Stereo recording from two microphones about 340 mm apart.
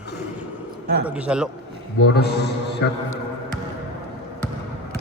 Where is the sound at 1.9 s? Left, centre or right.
Left.